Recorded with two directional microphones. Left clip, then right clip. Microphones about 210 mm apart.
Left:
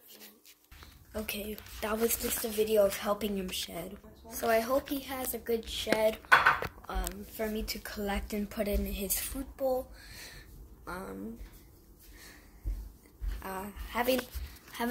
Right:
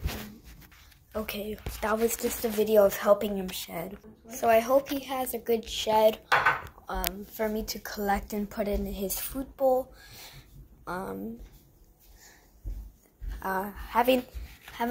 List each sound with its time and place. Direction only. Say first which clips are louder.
1.1 s a woman's voice: right 4 dB; centre (ahead or behind)
2.4 s a woman's voice: right 5 dB; 10° right (ahead or behind)
6.9 s a sound: right 8 dB; 5° left (ahead or behind)
7.3 s a woman's voice: right 3 dB; centre (ahead or behind)
13.4 s a woman's voice: right 9 dB; 10° right (ahead or behind)